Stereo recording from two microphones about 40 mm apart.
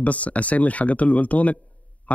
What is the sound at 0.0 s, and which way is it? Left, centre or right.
Speech, left.